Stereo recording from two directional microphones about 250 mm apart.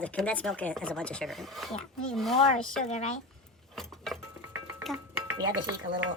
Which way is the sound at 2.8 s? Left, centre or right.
Left.